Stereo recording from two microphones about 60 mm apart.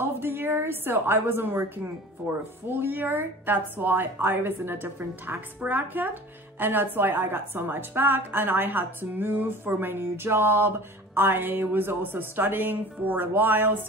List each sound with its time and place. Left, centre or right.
0.0 s a woman's voice: right
2.7 s a woman's voice: right